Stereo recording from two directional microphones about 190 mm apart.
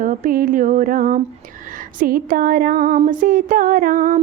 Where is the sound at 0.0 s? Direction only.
45° right (ahead or behind).